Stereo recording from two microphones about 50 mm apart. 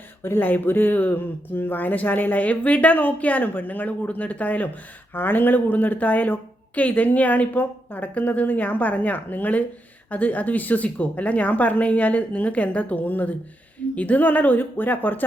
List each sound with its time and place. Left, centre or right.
0.2 s speech: left